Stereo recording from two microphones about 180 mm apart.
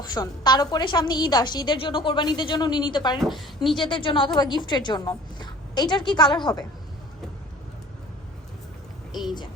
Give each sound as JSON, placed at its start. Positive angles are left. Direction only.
{"t": 0.0, "sound": "a woman's voice", "side_deg": 20}
{"t": 3.2, "sound": "a woman's voice", "side_deg": 0}
{"t": 3.8, "sound": "a woman's voice", "side_deg": 25}